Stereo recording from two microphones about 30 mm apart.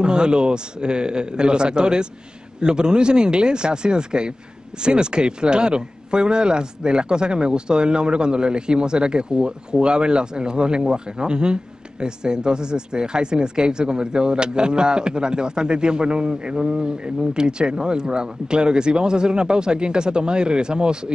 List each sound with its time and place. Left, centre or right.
0.0 s speech: right